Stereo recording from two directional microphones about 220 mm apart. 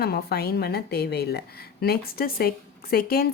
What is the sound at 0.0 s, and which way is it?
Speech, 45° left (ahead or behind).